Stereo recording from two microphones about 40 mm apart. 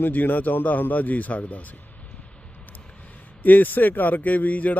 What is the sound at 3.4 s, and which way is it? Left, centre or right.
Speech, left.